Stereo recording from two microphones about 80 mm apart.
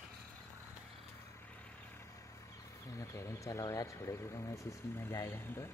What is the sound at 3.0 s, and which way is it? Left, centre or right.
Speech, left.